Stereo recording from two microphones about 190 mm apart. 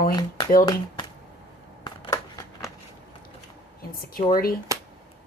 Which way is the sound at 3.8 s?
50° left (ahead or behind).